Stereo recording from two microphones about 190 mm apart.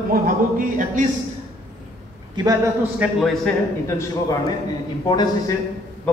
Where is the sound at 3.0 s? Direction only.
Centre (ahead or behind).